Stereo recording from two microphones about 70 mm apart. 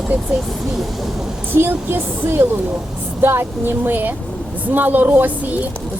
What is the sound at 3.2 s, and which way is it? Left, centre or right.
Speech, right.